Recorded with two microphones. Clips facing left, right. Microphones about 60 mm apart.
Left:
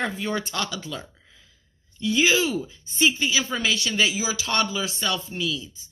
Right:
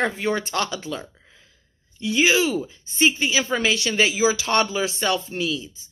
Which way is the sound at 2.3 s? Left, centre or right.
Right.